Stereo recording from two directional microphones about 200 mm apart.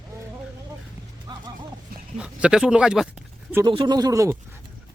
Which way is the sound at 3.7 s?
25° right (ahead or behind).